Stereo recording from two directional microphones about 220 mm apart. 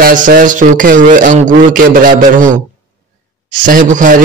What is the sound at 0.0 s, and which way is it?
Speech, 40° right (ahead or behind).